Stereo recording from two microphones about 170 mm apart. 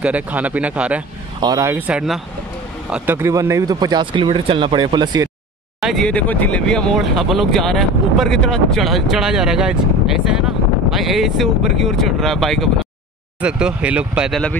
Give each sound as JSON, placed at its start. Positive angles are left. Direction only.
{"t": 0.0, "sound": "speech", "side_deg": -10}
{"t": 1.4, "sound": "speech", "side_deg": -20}
{"t": 5.8, "sound": "speech", "side_deg": 0}